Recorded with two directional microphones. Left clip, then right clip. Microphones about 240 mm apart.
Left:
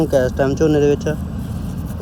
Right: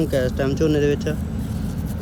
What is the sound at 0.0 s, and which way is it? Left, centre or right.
Speech, centre.